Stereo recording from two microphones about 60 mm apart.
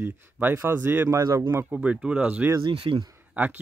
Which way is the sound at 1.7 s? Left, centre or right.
Right.